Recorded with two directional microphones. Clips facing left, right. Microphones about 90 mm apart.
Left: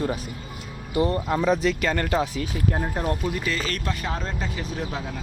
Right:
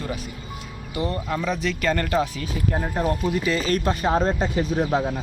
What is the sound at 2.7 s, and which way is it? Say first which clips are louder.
Speech: right 3 dB; centre (ahead or behind).